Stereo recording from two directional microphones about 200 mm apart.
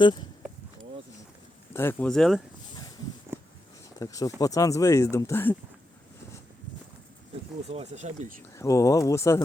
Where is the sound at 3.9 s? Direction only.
15° left (ahead or behind).